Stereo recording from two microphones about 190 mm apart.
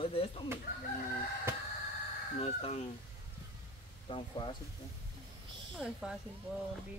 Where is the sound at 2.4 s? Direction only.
35° left (ahead or behind).